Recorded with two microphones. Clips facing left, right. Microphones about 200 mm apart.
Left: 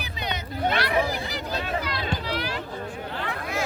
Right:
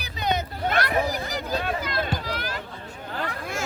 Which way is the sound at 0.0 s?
45° right (ahead or behind).